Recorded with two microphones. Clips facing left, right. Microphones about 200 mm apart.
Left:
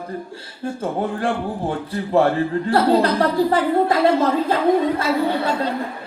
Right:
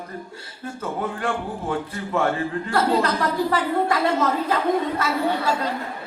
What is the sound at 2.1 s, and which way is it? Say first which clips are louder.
Speech: left 6 dB; 35° left (ahead or behind).